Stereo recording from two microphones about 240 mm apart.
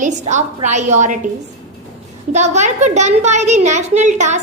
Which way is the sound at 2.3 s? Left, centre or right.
Right.